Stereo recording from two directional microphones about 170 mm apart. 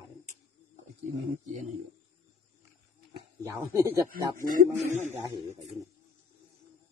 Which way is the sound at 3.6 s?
15° right (ahead or behind).